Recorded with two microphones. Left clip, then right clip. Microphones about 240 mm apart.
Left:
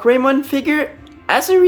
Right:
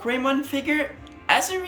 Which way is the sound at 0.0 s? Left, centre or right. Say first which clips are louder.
Left 10 dB; centre.